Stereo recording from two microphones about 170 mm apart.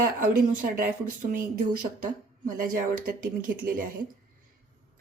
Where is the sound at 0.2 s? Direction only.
55° right (ahead or behind).